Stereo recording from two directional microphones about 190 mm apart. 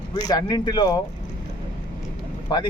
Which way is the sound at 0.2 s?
20° left (ahead or behind).